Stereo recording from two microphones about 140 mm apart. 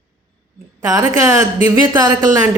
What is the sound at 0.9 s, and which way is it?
A woman's voice, 20° right (ahead or behind).